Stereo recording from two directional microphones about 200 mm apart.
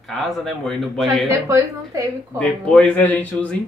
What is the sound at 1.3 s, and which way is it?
Speech, 15° right (ahead or behind).